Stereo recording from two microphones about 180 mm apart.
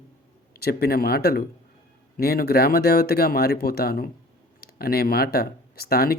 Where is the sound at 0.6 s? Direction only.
60° left (ahead or behind).